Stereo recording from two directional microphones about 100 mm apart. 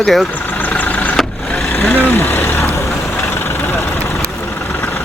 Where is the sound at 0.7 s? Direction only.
15° left (ahead or behind).